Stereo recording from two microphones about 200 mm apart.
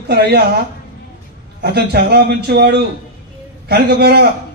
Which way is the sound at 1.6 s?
55° right (ahead or behind).